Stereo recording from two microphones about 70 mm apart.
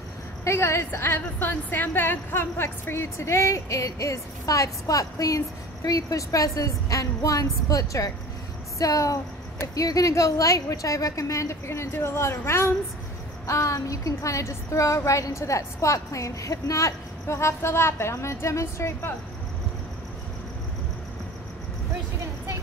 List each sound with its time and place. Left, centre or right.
0.5 s a woman's voice: left
1.1 s a woman's voice: left
13.5 s a woman's voice: left